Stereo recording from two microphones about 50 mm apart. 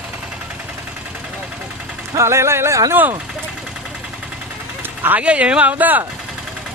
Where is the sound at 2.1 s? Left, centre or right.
Right.